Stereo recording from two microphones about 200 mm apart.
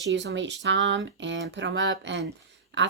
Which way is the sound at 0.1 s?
60° right (ahead or behind).